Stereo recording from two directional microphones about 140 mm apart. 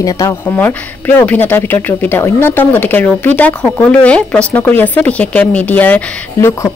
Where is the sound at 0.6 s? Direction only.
15° left (ahead or behind).